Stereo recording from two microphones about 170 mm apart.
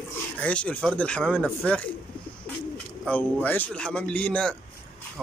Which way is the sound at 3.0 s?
10° left (ahead or behind).